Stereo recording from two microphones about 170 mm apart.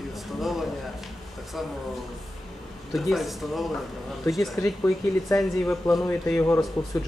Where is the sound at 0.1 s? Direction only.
Centre (ahead or behind).